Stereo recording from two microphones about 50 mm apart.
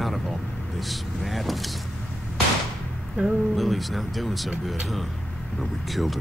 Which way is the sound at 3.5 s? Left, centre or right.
Centre.